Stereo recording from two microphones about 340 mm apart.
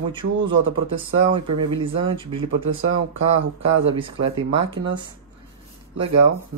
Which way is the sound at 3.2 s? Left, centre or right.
Right.